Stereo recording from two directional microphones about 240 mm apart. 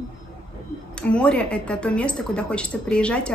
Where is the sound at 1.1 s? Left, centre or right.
Centre.